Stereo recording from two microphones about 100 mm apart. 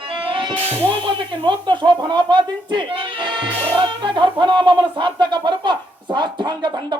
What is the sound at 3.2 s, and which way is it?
Speech, 55° right (ahead or behind).